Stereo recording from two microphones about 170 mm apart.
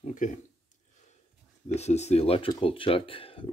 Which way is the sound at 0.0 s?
50° left (ahead or behind).